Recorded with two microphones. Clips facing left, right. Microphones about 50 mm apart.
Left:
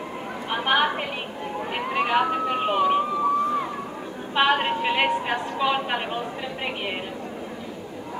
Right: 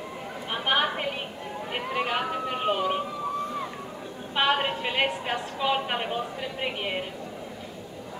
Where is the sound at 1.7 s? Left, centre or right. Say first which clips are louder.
Left 5 dB; left.